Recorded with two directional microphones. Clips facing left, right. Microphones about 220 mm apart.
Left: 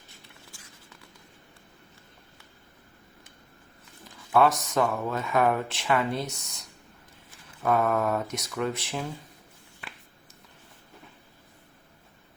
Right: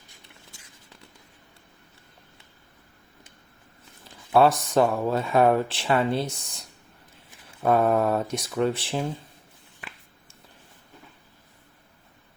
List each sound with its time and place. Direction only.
0.5 s vehicle: 20° right (ahead or behind)
4.3 s speech: 30° right (ahead or behind)
7.6 s speech: 30° right (ahead or behind)